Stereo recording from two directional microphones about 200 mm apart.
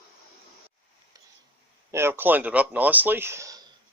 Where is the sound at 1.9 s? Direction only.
15° right (ahead or behind).